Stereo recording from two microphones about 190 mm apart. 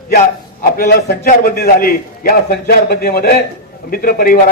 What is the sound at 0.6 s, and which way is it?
A man's voice, 50° left (ahead or behind).